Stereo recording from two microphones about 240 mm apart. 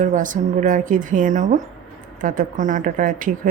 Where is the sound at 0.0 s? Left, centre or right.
Right.